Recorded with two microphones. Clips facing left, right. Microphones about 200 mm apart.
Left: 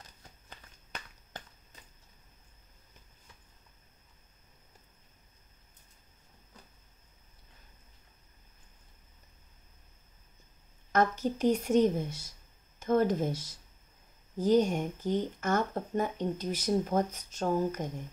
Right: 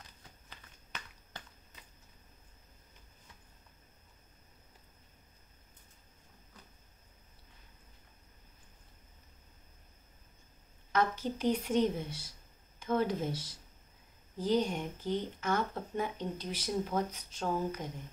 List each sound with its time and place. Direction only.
0.5 s walk: 45° left (ahead or behind)
10.9 s speech: 45° left (ahead or behind)